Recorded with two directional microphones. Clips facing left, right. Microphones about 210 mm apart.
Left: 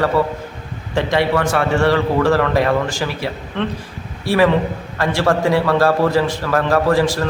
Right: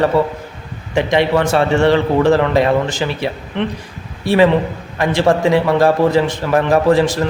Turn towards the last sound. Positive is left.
turn(degrees=-20)  # may be behind; listen again after turning